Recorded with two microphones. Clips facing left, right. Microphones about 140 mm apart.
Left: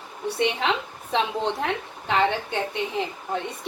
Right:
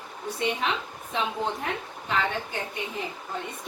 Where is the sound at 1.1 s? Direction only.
85° left.